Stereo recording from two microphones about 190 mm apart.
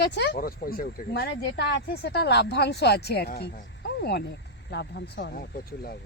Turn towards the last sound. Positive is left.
turn(degrees=55)  # may be behind; listen again after turning